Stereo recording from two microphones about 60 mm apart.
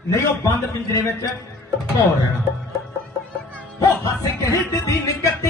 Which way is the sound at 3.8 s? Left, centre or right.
Left.